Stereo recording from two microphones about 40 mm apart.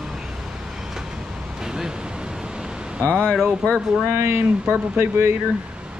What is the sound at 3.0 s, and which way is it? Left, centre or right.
Speech, left.